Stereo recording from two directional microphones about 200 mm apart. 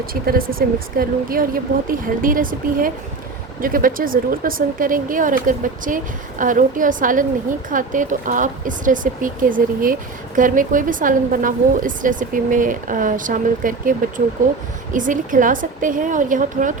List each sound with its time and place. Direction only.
0.0 s speech: 45° right (ahead or behind)